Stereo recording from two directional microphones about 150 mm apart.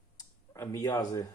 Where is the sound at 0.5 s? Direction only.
20° left (ahead or behind).